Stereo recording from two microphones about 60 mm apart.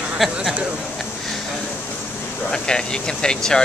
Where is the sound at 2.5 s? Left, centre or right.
Centre.